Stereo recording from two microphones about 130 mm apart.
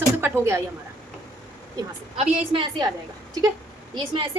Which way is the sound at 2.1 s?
40° right (ahead or behind).